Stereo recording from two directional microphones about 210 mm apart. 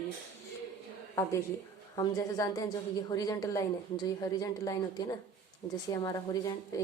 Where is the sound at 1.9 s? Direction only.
20° left (ahead or behind).